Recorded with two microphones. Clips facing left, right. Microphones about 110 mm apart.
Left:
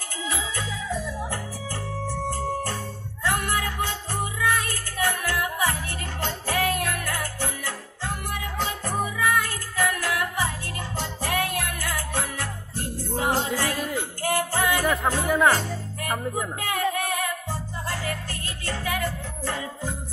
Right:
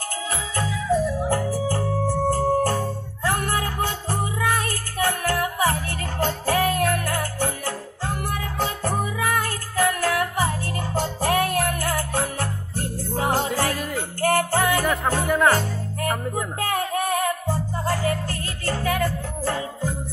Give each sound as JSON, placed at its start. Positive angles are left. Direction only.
{"t": 0.3, "sound": "music", "side_deg": -40}
{"t": 15.2, "sound": "music", "side_deg": 0}
{"t": 16.5, "sound": "music", "side_deg": -40}